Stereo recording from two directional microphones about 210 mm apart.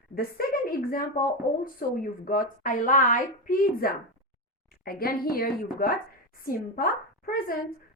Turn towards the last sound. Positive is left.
turn(degrees=45)  # may be behind; listen again after turning